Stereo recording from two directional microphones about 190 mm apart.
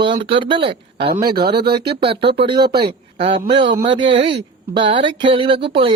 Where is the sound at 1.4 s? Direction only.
60° right (ahead or behind).